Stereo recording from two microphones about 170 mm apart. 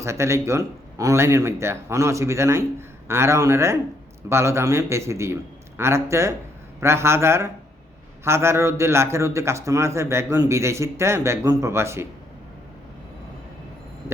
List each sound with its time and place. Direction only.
0.0 s a man's voice: 15° right (ahead or behind)